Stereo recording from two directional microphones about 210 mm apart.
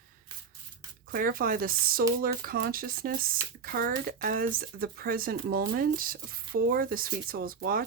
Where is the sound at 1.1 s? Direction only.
45° right (ahead or behind).